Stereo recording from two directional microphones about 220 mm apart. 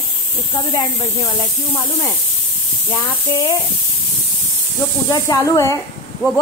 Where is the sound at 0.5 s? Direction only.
15° left (ahead or behind).